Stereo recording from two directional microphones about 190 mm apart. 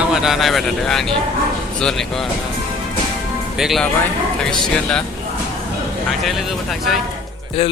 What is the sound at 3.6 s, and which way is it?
Speech, centre (ahead or behind).